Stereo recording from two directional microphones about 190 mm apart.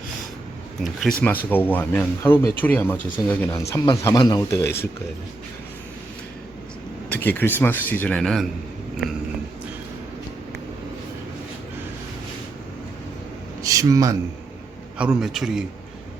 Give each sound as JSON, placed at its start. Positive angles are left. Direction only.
{"t": 0.8, "sound": "a man's voice", "side_deg": 0}
{"t": 7.1, "sound": "speech", "side_deg": 10}
{"t": 13.6, "sound": "a sound", "side_deg": -15}
{"t": 14.9, "sound": "a man's voice", "side_deg": -5}